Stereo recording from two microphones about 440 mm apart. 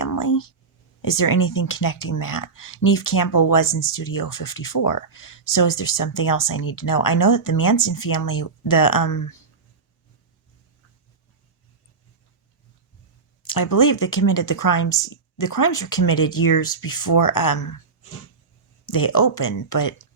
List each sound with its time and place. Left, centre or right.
0.0 s a sound: left
1.0 s speech: left
13.5 s speech: left
18.9 s speech: left